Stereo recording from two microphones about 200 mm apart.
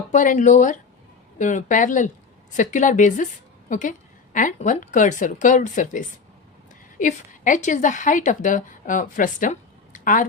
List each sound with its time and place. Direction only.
0.1 s a woman's voice: 40° left (ahead or behind)